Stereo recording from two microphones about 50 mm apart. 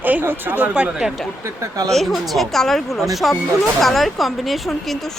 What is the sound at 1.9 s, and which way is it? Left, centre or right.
Speech, centre.